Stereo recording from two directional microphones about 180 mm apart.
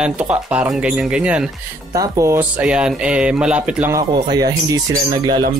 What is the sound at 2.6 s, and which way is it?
Speech, 5° right (ahead or behind).